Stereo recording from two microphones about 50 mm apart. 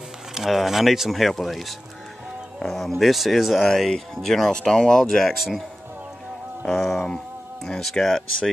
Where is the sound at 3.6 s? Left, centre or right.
Centre.